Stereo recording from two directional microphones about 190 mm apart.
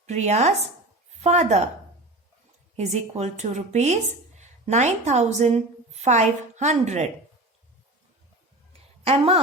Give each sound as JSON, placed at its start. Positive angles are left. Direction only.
{"t": 0.0, "sound": "speech", "side_deg": -35}
{"t": 2.7, "sound": "speech", "side_deg": -35}
{"t": 9.0, "sound": "speech", "side_deg": -30}